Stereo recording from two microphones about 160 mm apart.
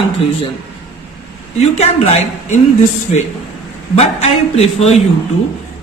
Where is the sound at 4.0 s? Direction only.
40° left (ahead or behind).